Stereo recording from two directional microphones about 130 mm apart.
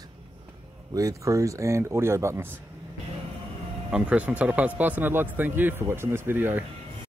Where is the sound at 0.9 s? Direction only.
25° right (ahead or behind).